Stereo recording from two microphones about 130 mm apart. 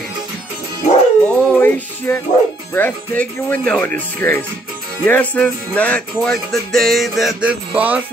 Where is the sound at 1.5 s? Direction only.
15° left (ahead or behind).